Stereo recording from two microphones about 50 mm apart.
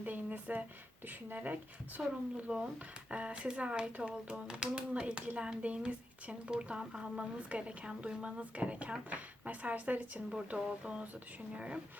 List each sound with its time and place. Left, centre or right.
0.0 s a woman's voice: right
2.0 s speech: right
2.5 s speech: centre
3.1 s speech: right